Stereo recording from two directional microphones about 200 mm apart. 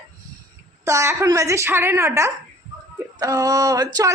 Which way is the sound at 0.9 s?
15° right (ahead or behind).